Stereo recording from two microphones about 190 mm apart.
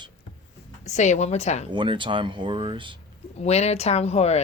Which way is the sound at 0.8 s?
40° left (ahead or behind).